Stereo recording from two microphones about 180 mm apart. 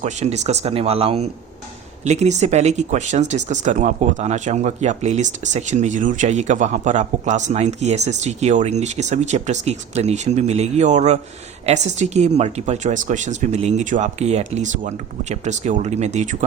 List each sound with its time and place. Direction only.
0.0 s speech: 40° right (ahead or behind)